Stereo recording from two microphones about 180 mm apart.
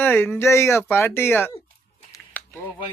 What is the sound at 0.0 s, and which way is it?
Speech, 10° left (ahead or behind).